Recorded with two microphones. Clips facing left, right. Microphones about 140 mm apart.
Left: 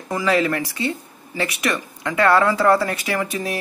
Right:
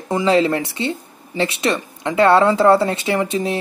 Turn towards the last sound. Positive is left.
turn(degrees=-25)  # may be behind; listen again after turning